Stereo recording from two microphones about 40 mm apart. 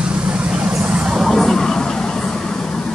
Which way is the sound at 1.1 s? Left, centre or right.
Centre.